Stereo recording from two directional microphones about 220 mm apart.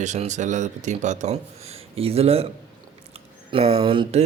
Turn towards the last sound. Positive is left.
turn(degrees=-25)  # may be behind; listen again after turning